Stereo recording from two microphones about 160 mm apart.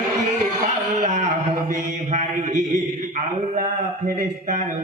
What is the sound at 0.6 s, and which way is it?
A man's voice, 45° right (ahead or behind).